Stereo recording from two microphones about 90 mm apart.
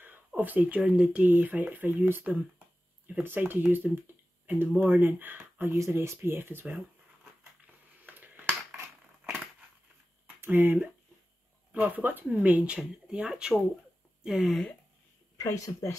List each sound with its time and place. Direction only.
0.4 s speech: 20° right (ahead or behind)
8.0 s finger snapping: 20° right (ahead or behind)
10.4 s speech: 25° right (ahead or behind); by 14.6 s 5° right (ahead or behind)
15.3 s speech: 40° left (ahead or behind)